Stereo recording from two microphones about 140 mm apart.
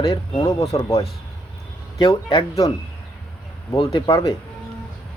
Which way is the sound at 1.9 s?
30° left (ahead or behind).